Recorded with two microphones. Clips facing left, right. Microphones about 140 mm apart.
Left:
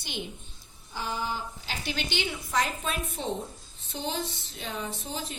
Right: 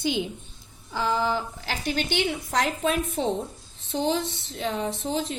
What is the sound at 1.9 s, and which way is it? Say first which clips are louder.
Speech: right 6 dB; 45° right (ahead or behind).